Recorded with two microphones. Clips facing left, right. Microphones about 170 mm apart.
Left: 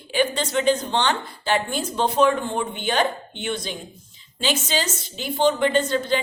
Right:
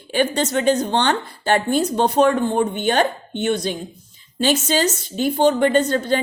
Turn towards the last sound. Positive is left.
turn(degrees=-40)  # may be behind; listen again after turning